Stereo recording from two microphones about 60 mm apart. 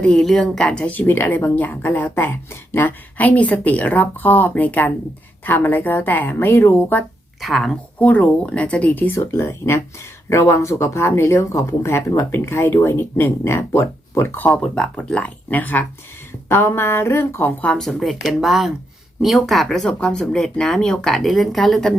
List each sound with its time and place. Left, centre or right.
0.0 s speech: centre
0.9 s speech: left
6.5 s speech: left
7.4 s speech: centre
7.9 s speech: left
9.0 s speech: left
14.4 s speech: centre
16.5 s speech: left
17.7 s speech: centre